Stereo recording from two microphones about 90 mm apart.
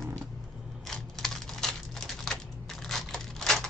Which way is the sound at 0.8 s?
5° left (ahead or behind).